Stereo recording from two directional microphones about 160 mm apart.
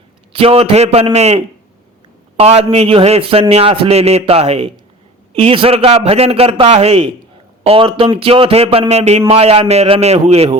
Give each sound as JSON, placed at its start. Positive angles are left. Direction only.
{"t": 0.3, "sound": "speech", "side_deg": -35}